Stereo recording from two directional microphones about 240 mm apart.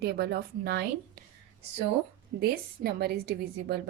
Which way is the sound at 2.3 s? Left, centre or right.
Right.